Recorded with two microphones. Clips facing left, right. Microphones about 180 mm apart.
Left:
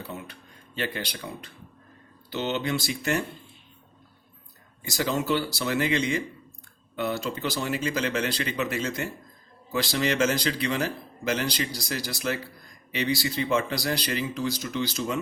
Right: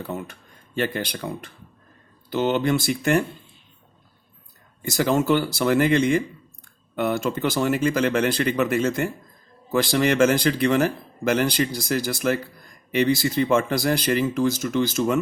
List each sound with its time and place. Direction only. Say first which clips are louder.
0.0 s a sound: right 7 dB; 50° right (ahead or behind)
0.8 s speech: right 6 dB; 50° right (ahead or behind)
4.8 s speech: right 6 dB; 50° right (ahead or behind)